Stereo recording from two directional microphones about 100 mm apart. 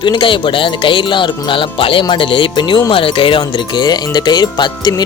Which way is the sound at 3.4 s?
50° left (ahead or behind).